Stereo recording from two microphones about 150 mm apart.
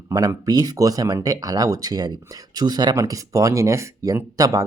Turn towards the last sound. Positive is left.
turn(degrees=-20)  # may be behind; listen again after turning